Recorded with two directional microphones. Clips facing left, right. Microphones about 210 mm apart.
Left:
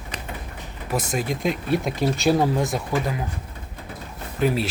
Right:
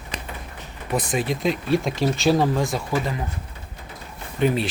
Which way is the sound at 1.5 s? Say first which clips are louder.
Right 2 dB; 55° left (ahead or behind).